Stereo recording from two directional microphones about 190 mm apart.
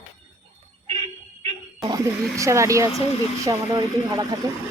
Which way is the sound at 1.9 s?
15° right (ahead or behind).